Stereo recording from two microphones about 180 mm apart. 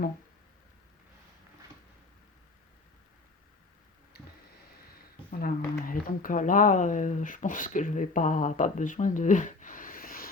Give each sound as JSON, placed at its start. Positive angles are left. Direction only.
{"t": 5.4, "sound": "speech", "side_deg": 50}